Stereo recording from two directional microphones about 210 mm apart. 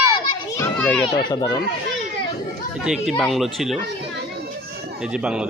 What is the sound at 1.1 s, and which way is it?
Speech, 20° left (ahead or behind).